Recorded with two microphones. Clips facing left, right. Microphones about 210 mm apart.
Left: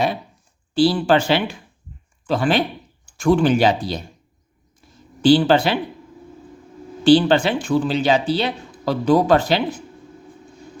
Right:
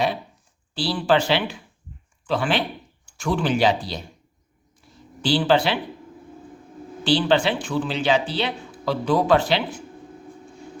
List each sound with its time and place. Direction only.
0.7 s speech: 45° left (ahead or behind)
5.2 s speech: 45° left (ahead or behind)
7.0 s speech: 45° left (ahead or behind)